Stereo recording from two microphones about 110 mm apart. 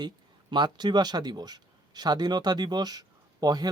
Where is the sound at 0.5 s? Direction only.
40° right (ahead or behind).